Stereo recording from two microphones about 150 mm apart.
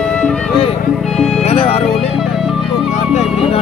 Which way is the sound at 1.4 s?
40° left (ahead or behind).